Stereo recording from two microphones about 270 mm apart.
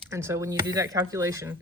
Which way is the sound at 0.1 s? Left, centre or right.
Centre.